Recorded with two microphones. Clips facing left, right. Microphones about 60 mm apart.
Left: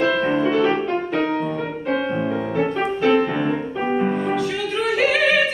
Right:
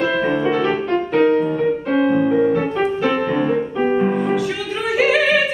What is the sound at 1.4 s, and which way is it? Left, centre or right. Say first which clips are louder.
Music: right 6 dB; centre.